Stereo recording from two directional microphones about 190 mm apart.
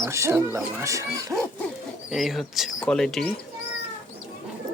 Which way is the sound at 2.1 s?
Centre (ahead or behind).